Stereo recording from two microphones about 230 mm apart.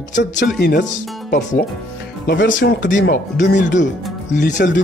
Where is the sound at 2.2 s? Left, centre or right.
Left.